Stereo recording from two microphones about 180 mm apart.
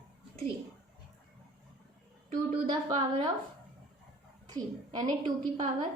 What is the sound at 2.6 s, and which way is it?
Speech, 25° right (ahead or behind).